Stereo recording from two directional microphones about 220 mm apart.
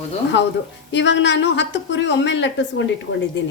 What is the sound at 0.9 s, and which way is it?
A woman's voice, 55° left (ahead or behind).